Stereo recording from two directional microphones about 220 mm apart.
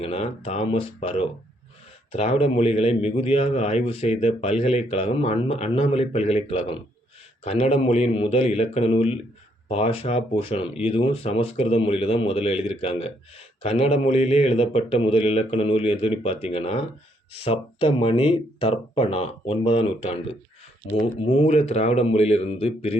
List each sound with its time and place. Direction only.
0.0 s speech: 25° left (ahead or behind)